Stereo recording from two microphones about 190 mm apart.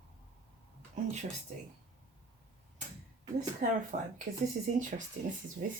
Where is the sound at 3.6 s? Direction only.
40° right (ahead or behind).